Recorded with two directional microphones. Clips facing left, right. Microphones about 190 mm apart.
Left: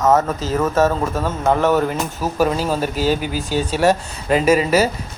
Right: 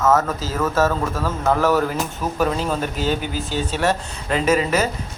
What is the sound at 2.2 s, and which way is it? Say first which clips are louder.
Speech: left 3 dB; 5° left (ahead or behind).